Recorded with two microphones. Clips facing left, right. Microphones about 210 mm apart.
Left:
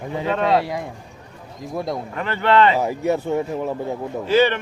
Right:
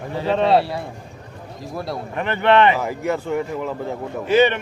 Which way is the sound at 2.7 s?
20° left (ahead or behind).